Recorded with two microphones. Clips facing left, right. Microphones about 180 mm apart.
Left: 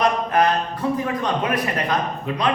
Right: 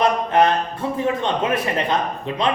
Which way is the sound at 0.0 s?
25° right (ahead or behind).